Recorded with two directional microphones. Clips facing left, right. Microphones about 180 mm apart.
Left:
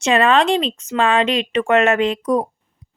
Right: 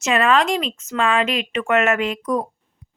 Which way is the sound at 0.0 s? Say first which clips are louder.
Left 3 dB; 30° left (ahead or behind).